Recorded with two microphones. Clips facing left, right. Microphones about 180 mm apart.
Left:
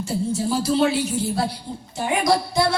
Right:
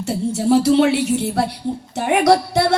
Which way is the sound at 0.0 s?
75° right (ahead or behind).